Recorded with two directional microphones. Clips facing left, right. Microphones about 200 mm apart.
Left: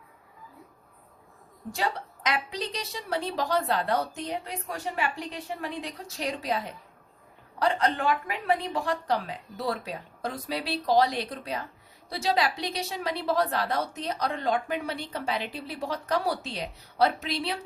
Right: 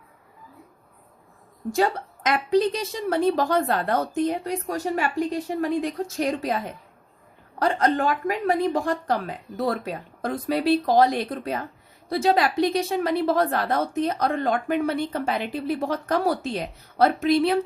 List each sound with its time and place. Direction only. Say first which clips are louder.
1.7 s a woman's voice: right 8 dB; 45° right (ahead or behind)